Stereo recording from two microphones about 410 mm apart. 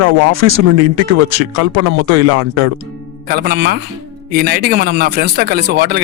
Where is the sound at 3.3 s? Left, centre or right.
Right.